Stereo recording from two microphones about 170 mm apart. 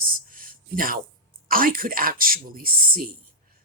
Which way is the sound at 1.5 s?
55° right (ahead or behind).